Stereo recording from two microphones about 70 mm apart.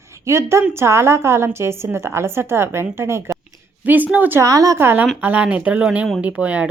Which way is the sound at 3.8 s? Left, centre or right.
Right.